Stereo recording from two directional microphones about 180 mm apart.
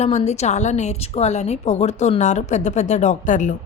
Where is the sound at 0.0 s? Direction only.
40° left (ahead or behind).